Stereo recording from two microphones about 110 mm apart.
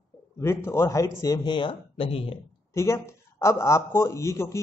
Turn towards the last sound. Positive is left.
turn(degrees=25)  # may be behind; listen again after turning